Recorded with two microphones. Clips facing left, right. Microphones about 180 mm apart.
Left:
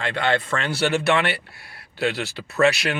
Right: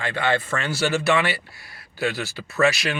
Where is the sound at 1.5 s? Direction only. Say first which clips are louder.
Left 1 dB; 60° left (ahead or behind).